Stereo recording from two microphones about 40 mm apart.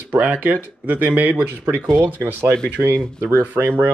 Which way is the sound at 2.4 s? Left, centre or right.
Right.